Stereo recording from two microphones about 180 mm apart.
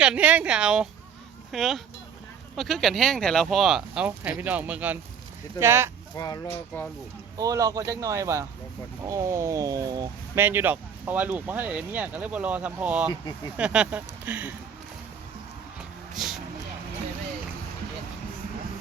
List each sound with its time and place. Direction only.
0.0 s speech: 5° right (ahead or behind)
6.1 s speech: 20° left (ahead or behind)
7.3 s speech: 20° right (ahead or behind)
13.1 s speech: 20° left (ahead or behind)
13.6 s speech: 5° right (ahead or behind)
16.1 s a sound: centre (ahead or behind)